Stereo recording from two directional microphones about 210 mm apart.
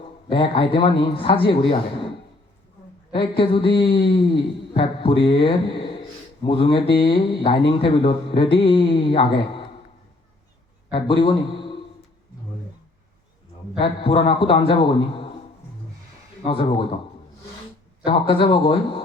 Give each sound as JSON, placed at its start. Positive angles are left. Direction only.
{"t": 0.3, "sound": "a man's voice", "side_deg": 25}
{"t": 3.1, "sound": "a man's voice", "side_deg": 25}
{"t": 10.9, "sound": "a man's voice", "side_deg": 25}
{"t": 13.7, "sound": "a man's voice", "side_deg": 25}
{"t": 16.4, "sound": "a man's voice", "side_deg": 25}
{"t": 18.0, "sound": "a man's voice", "side_deg": 25}